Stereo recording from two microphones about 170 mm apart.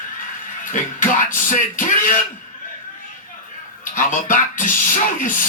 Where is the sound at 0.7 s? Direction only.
50° left (ahead or behind).